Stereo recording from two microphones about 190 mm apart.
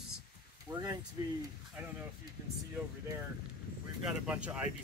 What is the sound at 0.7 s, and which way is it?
Speech, 15° right (ahead or behind).